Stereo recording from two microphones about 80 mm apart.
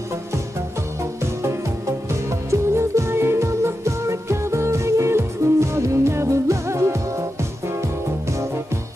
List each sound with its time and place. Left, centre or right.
1.2 s music: right